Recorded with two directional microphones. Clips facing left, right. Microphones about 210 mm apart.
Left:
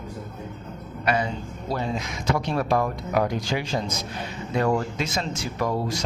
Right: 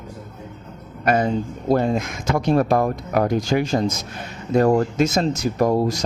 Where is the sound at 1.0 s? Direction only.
45° right (ahead or behind).